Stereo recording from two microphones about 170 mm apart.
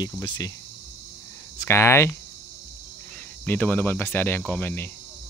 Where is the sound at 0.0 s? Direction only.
25° left (ahead or behind).